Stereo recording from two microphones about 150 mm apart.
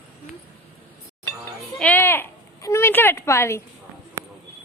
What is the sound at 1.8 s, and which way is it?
Speech, 10° left (ahead or behind).